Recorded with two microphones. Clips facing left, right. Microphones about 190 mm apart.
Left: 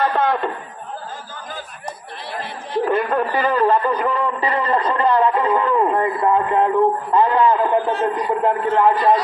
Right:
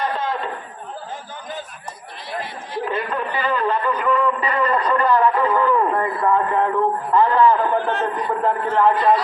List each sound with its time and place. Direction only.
0.0 s chatter: 60° left (ahead or behind)
2.9 s a man's voice: 50° left (ahead or behind); by 8.9 s 15° left (ahead or behind)